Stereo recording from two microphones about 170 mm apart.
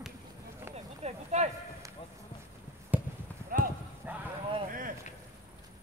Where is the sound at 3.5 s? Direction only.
55° right (ahead or behind).